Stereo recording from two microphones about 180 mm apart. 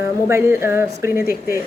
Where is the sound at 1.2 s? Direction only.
55° left (ahead or behind).